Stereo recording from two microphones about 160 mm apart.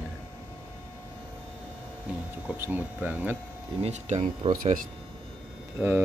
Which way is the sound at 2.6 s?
10° right (ahead or behind).